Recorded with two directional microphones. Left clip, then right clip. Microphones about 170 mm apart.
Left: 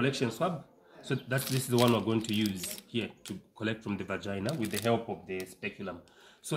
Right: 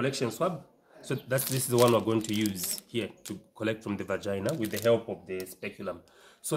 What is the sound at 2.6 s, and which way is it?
Speech, 10° right (ahead or behind).